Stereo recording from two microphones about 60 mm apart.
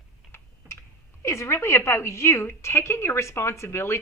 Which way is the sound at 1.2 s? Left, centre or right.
Left.